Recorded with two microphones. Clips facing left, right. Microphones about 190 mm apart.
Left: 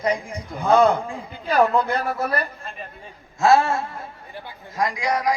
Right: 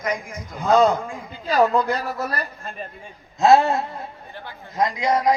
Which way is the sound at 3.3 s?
20° right (ahead or behind).